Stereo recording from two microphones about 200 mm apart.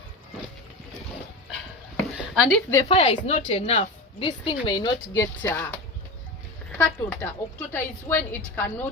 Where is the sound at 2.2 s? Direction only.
Centre (ahead or behind).